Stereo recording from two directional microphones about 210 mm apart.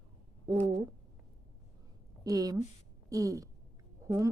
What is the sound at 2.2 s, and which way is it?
A woman's voice, 15° right (ahead or behind).